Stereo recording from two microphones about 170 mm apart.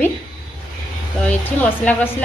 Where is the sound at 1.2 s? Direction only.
10° left (ahead or behind).